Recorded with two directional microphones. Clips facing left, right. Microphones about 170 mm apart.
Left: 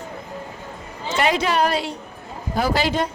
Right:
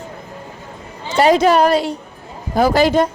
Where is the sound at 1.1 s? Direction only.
40° right (ahead or behind).